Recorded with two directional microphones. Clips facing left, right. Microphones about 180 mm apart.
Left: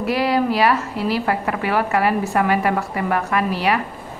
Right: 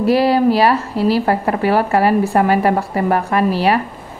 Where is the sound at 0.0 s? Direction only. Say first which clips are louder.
Right 6 dB; 35° right (ahead or behind).